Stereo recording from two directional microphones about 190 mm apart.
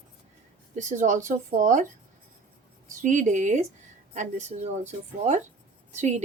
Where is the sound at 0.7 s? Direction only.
40° right (ahead or behind).